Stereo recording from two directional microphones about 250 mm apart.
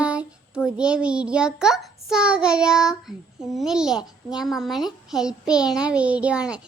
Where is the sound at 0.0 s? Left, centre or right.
Centre.